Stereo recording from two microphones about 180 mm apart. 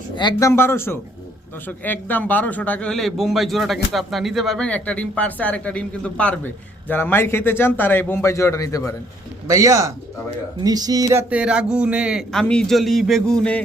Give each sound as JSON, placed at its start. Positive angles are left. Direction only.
{"t": 0.2, "sound": "speech", "side_deg": 20}
{"t": 9.5, "sound": "speech", "side_deg": -20}